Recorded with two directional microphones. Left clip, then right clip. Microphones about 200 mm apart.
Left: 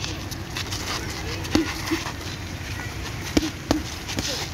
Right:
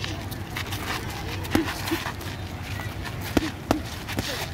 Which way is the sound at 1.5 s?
Centre (ahead or behind).